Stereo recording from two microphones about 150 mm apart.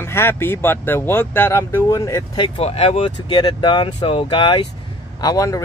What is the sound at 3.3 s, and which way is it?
Speech, 30° left (ahead or behind).